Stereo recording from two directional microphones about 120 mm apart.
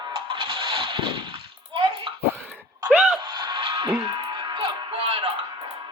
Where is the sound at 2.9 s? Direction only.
15° right (ahead or behind).